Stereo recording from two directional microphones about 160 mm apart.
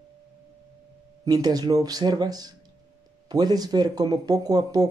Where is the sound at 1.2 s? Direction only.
25° right (ahead or behind).